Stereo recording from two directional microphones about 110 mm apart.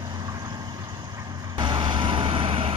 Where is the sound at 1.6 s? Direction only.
45° right (ahead or behind).